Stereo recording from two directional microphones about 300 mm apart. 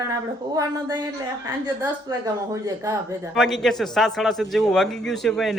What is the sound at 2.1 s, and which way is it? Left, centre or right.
Speech, centre.